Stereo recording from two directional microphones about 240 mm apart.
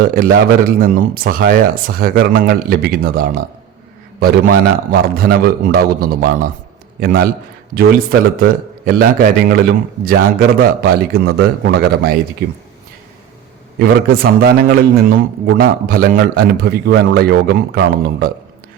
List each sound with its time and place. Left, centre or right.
0.0 s a man's voice: right
13.7 s a man's voice: right